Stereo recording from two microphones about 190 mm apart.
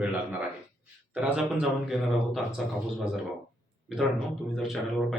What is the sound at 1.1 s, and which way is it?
Speech, 5° right (ahead or behind).